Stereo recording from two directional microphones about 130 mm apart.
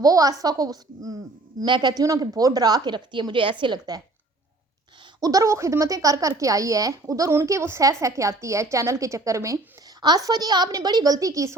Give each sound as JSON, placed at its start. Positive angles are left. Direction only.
{"t": 0.0, "sound": "a woman's voice", "side_deg": -25}
{"t": 5.2, "sound": "speech", "side_deg": -25}